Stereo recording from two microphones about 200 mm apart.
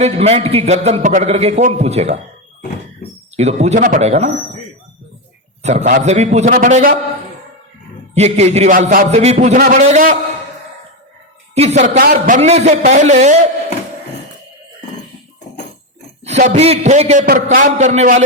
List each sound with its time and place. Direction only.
0.0 s a man's voice: 30° right (ahead or behind)
3.3 s a man's voice: 35° right (ahead or behind)
5.6 s a man's voice: 35° right (ahead or behind)
8.1 s a man's voice: 35° right (ahead or behind)
9.6 s a man's voice: 45° right (ahead or behind)
11.5 s speech: 30° right (ahead or behind)
11.8 s a man's voice: 50° right (ahead or behind)
12.4 s a man's voice: 35° right (ahead or behind)
16.2 s a man's voice: 40° right (ahead or behind)
17.2 s a man's voice: 45° right (ahead or behind)